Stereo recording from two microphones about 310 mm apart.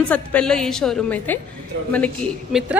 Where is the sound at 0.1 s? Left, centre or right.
Centre.